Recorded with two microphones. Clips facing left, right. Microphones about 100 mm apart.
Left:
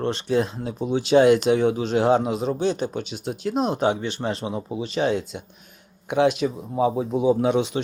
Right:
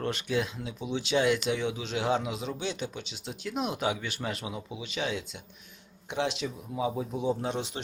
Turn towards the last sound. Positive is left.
turn(degrees=65)  # may be behind; listen again after turning